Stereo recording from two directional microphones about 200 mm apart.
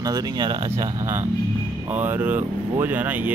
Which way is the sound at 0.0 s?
20° right (ahead or behind).